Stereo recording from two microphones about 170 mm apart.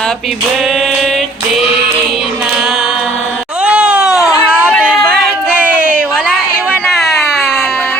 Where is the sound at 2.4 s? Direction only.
Centre (ahead or behind).